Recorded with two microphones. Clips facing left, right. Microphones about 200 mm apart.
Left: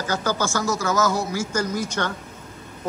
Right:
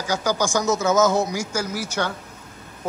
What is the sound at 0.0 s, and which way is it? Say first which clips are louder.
Speech: right 1 dB; 10° right (ahead or behind).